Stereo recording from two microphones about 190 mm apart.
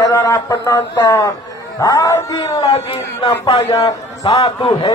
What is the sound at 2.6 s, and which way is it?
A man's voice, 30° left (ahead or behind).